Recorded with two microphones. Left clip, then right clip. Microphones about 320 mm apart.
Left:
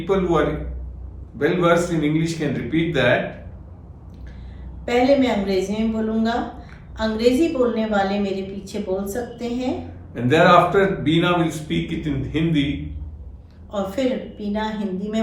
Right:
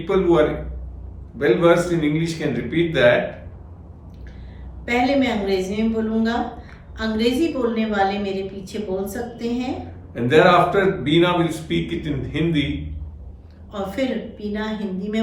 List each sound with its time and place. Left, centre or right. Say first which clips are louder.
0.0 s a man's voice: right 2 dB; centre
4.9 s a woman's voice: left 2 dB; centre
13.7 s a woman's voice: left 2 dB; centre